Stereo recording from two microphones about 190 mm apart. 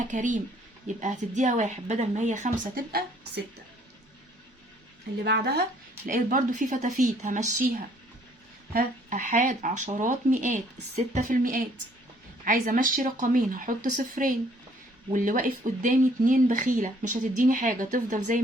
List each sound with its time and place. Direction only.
0.0 s speech: 40° right (ahead or behind)
5.2 s speech: 55° right (ahead or behind)
6.1 s speech: 45° right (ahead or behind)
8.7 s speech: 45° right (ahead or behind)